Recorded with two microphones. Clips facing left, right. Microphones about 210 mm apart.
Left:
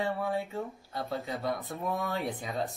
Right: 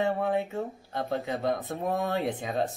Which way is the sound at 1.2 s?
25° right (ahead or behind).